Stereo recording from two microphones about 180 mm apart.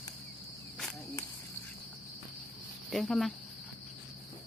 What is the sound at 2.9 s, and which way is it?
Speech, centre (ahead or behind).